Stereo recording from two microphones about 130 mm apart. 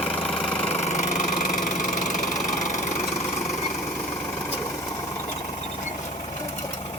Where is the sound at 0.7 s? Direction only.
60° left (ahead or behind).